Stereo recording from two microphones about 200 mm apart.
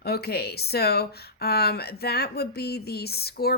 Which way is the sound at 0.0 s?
50° left (ahead or behind).